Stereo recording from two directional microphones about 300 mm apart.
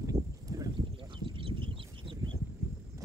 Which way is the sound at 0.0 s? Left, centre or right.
Centre.